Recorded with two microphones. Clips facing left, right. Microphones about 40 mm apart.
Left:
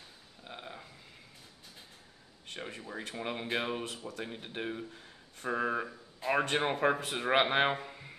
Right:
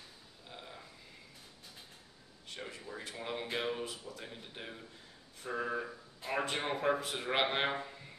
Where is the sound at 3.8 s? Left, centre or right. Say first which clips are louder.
Left 4 dB; left.